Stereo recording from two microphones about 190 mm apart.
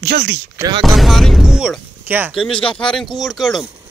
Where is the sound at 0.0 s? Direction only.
70° right (ahead or behind).